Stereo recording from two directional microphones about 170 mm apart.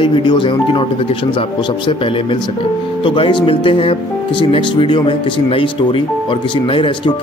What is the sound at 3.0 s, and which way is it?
Speech, 30° left (ahead or behind).